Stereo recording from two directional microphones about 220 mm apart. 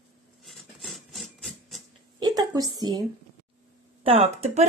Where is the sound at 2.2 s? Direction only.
20° right (ahead or behind).